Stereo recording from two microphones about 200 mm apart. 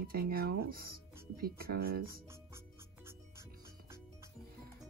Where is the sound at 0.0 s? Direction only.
50° right (ahead or behind).